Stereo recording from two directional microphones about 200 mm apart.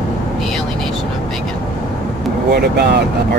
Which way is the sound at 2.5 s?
55° right (ahead or behind).